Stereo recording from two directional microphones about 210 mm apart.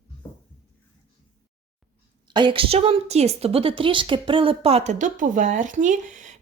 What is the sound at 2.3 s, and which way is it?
A woman's voice, 25° right (ahead or behind).